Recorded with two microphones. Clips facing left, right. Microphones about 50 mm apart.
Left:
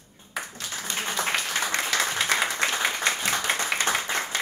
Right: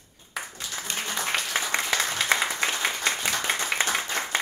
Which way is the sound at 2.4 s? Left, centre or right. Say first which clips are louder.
Left 1 dB; centre.